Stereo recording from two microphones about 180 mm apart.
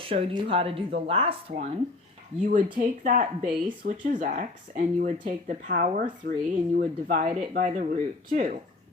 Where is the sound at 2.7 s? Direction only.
45° right (ahead or behind).